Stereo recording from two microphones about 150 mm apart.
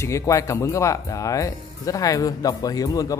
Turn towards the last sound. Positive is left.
turn(degrees=25)  # may be behind; listen again after turning